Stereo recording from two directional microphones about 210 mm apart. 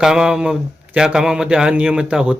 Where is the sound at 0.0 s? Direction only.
5° right (ahead or behind).